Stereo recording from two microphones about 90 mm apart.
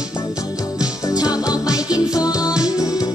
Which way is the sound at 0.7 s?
45° left (ahead or behind).